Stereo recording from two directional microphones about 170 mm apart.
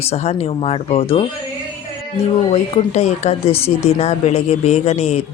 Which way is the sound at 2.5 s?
40° left (ahead or behind).